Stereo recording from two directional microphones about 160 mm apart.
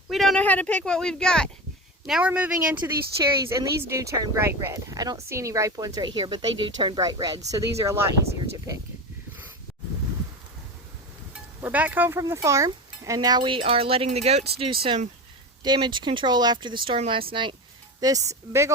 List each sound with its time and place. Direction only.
0.1 s speech: centre (ahead or behind); by 8.7 s 20° right (ahead or behind)
11.6 s speech: 10° right (ahead or behind); by 15.1 s 40° right (ahead or behind)
15.6 s speech: 25° right (ahead or behind)
18.0 s speech: 20° right (ahead or behind)